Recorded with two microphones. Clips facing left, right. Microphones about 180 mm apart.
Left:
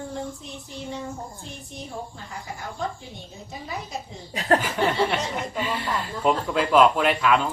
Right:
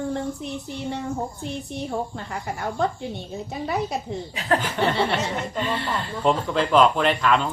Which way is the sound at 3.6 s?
70° right (ahead or behind).